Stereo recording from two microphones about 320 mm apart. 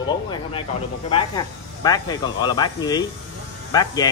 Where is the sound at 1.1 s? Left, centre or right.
Centre.